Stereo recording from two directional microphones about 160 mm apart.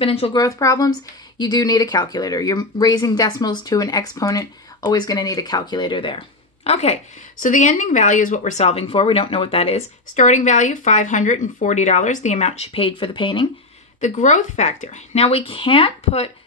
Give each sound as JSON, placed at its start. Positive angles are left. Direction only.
{"t": 0.0, "sound": "speech", "side_deg": 35}
{"t": 0.4, "sound": "speech", "side_deg": 20}
{"t": 14.0, "sound": "speech", "side_deg": 50}